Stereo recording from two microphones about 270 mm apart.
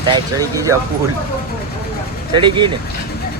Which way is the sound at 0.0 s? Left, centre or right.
Centre.